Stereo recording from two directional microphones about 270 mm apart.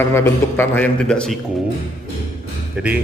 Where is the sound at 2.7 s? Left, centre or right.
Centre.